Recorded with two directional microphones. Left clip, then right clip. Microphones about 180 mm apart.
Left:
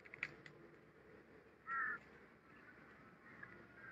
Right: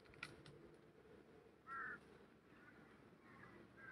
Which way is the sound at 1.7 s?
5° left (ahead or behind).